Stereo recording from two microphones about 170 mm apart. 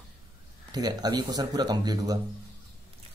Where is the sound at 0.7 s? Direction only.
25° right (ahead or behind).